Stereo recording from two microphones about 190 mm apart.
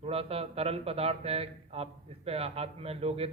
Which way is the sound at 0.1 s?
30° right (ahead or behind).